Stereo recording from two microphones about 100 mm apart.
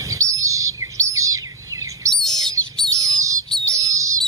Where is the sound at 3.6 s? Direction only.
35° right (ahead or behind).